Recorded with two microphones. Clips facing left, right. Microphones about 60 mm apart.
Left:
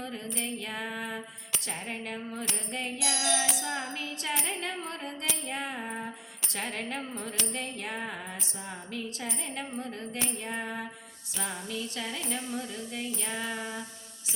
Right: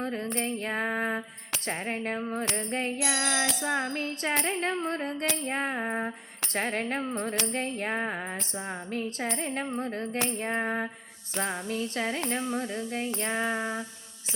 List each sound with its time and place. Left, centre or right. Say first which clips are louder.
0.0 s female singing: right 6 dB; right
0.3 s music: right 5 dB; right
2.4 s music: right 5 dB; right
2.6 s music: right 4 dB; right